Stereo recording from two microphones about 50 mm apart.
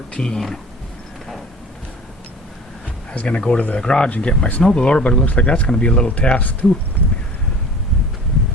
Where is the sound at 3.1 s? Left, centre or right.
Centre; by 6.7 s left.